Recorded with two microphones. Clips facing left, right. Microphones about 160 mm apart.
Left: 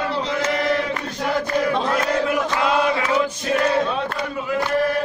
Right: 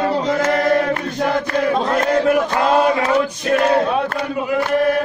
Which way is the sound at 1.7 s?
40° right (ahead or behind).